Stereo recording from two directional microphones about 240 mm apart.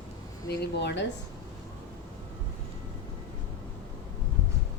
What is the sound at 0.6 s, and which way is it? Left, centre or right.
Speech, left.